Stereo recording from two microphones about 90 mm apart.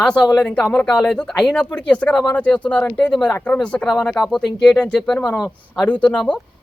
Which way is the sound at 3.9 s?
Centre (ahead or behind).